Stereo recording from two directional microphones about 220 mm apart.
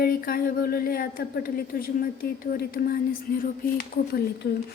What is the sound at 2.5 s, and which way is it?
Speech, 45° left (ahead or behind).